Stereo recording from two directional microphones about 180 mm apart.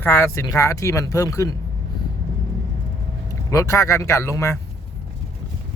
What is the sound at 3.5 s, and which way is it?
Speech, 15° left (ahead or behind).